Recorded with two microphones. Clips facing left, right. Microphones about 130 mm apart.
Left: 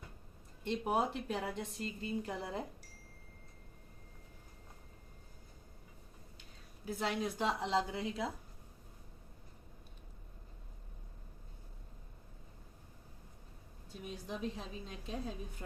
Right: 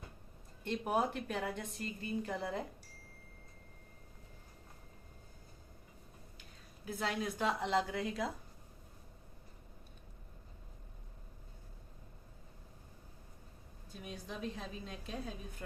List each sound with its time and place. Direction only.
0.6 s a woman's voice: 25° left (ahead or behind)
6.8 s a woman's voice: 25° left (ahead or behind)
14.0 s a woman's voice: 25° left (ahead or behind)